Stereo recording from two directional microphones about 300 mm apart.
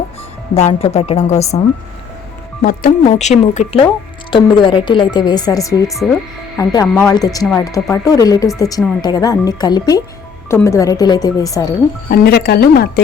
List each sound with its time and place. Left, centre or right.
0.5 s speech: left
5.9 s speech: centre
12.0 s speech: left